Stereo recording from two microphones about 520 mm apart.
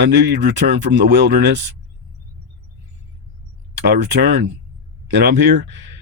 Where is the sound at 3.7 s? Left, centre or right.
Centre.